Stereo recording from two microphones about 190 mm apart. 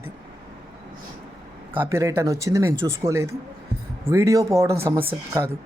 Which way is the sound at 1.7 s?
10° right (ahead or behind).